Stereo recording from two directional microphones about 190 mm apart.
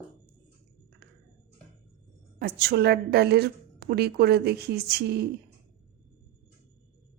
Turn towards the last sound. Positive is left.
turn(degrees=-60)  # may be behind; listen again after turning